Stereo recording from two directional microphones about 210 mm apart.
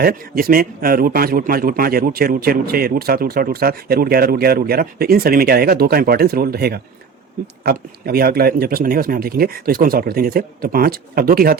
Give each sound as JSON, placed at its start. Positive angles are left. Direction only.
{"t": 0.0, "sound": "a man's voice", "side_deg": -45}